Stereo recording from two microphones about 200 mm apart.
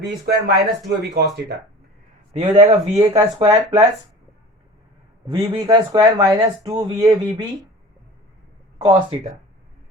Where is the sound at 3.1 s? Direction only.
25° right (ahead or behind).